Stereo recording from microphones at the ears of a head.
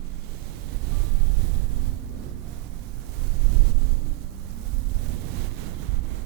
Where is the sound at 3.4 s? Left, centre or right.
Right.